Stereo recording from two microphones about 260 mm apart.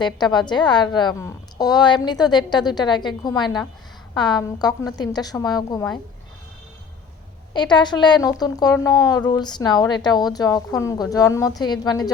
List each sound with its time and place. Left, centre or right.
0.0 s a woman's voice: centre
7.5 s a woman's voice: centre